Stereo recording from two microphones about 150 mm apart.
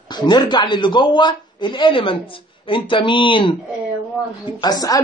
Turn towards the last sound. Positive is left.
turn(degrees=25)  # may be behind; listen again after turning